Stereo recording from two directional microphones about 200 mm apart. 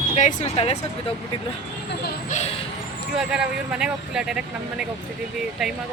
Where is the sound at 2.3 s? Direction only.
30° left (ahead or behind).